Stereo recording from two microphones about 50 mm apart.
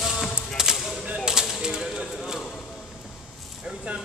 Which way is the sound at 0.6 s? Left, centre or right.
Centre.